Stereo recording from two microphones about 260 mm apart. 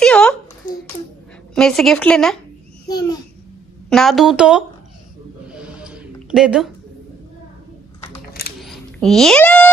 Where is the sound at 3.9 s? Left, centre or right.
Centre.